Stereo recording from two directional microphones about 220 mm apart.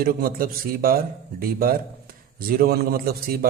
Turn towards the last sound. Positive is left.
turn(degrees=-40)  # may be behind; listen again after turning